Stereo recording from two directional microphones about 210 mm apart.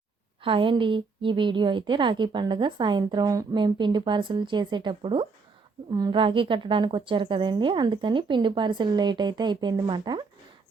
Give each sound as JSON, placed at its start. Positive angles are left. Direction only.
{"t": 0.4, "sound": "a woman's voice", "side_deg": -25}